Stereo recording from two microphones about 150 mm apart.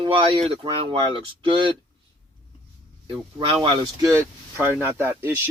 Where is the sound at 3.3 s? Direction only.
35° right (ahead or behind).